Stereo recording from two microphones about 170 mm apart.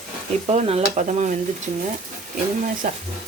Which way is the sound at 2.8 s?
50° right (ahead or behind).